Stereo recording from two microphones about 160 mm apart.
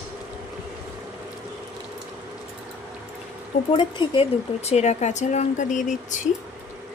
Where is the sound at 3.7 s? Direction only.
30° left (ahead or behind); by 6.2 s 50° left (ahead or behind).